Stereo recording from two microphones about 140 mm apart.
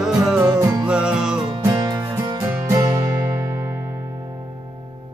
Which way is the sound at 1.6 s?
25° right (ahead or behind).